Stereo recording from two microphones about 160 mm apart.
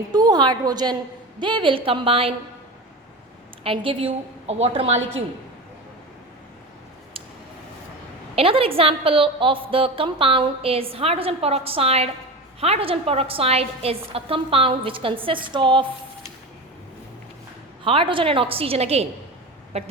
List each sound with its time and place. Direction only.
0.1 s a woman's voice: 25° right (ahead or behind)
3.6 s a woman's voice: 35° right (ahead or behind)
8.4 s a woman's voice: 35° right (ahead or behind)
17.8 s a woman's voice: 35° right (ahead or behind)